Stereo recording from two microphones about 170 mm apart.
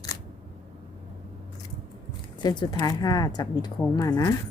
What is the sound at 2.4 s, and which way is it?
Speech, 20° left (ahead or behind).